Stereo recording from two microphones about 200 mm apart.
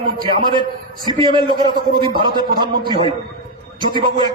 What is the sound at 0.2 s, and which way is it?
Speech, 25° right (ahead or behind).